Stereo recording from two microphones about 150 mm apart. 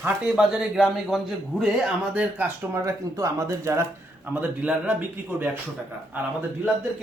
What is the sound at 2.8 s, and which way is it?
Speech, 20° right (ahead or behind).